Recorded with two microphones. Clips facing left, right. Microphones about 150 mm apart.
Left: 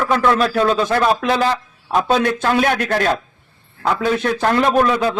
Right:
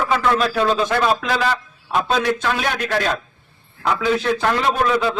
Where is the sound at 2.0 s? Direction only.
50° left (ahead or behind).